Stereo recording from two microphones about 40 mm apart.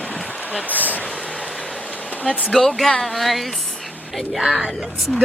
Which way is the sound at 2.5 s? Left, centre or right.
Centre.